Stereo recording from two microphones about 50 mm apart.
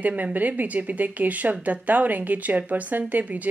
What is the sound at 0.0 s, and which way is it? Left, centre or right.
Speech, right.